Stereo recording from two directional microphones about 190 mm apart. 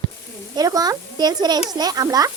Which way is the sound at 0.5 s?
20° right (ahead or behind).